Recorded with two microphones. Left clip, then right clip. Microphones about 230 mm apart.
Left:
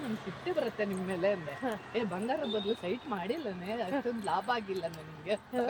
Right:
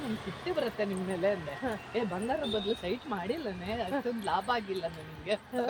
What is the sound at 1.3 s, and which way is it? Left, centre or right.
Speech, right.